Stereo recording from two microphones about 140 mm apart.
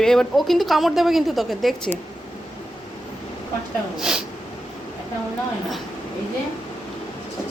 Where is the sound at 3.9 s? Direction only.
5° right (ahead or behind).